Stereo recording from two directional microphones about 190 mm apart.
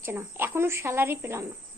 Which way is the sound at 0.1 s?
10° right (ahead or behind).